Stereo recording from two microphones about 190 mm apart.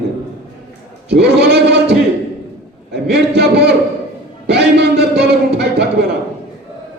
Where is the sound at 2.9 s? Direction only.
60° right (ahead or behind).